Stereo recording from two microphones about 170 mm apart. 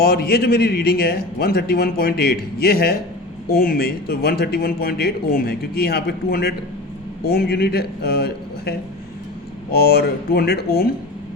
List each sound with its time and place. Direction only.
0.0 s speech: 65° left (ahead or behind)
9.7 s speech: 65° left (ahead or behind)